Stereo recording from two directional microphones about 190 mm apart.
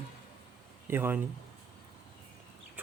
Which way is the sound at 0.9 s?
10° right (ahead or behind).